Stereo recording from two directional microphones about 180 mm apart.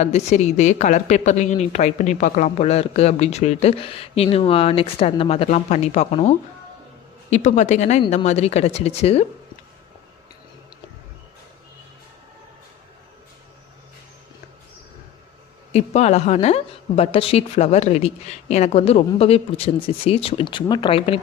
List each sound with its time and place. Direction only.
0.0 s a woman's voice: 40° left (ahead or behind)
15.7 s a woman's voice: 35° left (ahead or behind)